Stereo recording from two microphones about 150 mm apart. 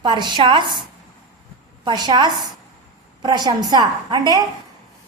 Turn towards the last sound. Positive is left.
turn(degrees=-30)  # may be behind; listen again after turning